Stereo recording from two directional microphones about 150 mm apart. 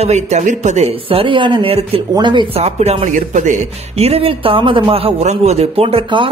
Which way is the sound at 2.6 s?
45° right (ahead or behind).